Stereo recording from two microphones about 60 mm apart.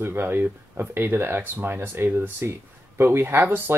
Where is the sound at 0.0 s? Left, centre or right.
Right.